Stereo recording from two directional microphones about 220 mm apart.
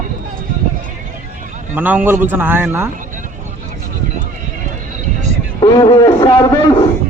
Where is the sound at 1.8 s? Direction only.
10° right (ahead or behind).